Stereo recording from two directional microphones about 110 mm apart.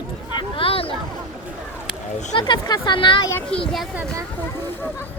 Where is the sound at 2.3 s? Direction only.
40° left (ahead or behind).